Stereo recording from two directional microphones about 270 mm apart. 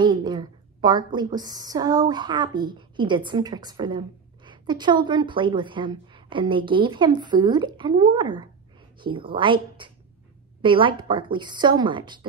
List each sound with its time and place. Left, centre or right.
0.0 s a woman's voice: centre